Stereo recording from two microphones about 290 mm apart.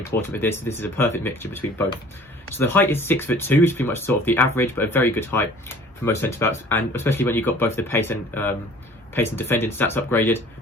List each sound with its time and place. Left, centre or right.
0.2 s speech: centre
2.5 s speech: centre